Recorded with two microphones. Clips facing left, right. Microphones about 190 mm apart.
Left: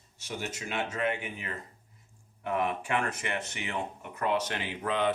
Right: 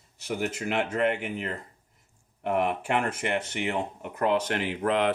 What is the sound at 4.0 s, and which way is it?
Speech, 60° right (ahead or behind).